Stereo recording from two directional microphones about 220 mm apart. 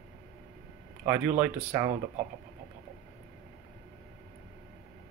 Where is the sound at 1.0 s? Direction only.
10° right (ahead or behind).